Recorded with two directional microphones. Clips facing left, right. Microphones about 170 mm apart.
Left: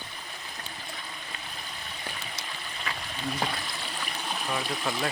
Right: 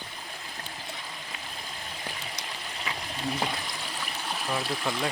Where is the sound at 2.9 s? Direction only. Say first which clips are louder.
Even; 15° right (ahead or behind).